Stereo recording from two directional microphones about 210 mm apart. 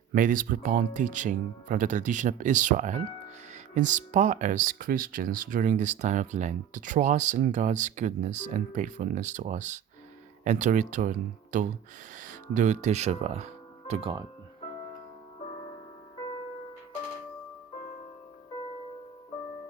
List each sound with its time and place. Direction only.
0.1 s speech: 40° right (ahead or behind); by 14.3 s 25° right (ahead or behind)